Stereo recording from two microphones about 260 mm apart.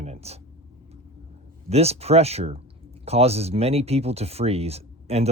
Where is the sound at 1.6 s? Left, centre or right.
Right.